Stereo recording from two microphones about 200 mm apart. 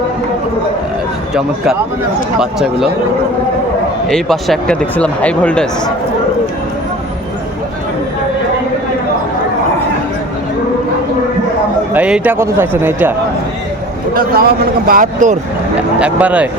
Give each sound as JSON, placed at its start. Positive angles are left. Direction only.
{"t": 1.3, "sound": "speech", "side_deg": -5}
{"t": 4.1, "sound": "speech", "side_deg": 0}
{"t": 11.9, "sound": "speech", "side_deg": -5}
{"t": 14.1, "sound": "speech", "side_deg": -50}
{"t": 16.0, "sound": "speech", "side_deg": -5}